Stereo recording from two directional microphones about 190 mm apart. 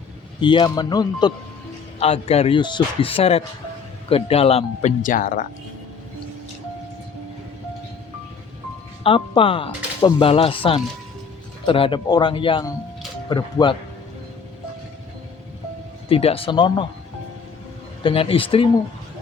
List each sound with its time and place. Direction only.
0.3 s speech: 25° left (ahead or behind)
2.0 s speech: 35° left (ahead or behind)
9.0 s speech: 25° left (ahead or behind)
16.0 s speech: 30° left (ahead or behind)
18.0 s speech: 30° left (ahead or behind)